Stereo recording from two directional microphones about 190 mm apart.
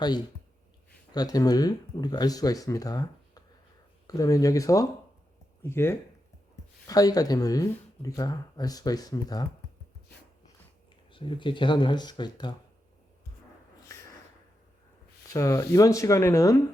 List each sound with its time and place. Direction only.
1.1 s speech: 20° left (ahead or behind)
11.1 s speech: 25° left (ahead or behind)
15.3 s speech: 15° left (ahead or behind)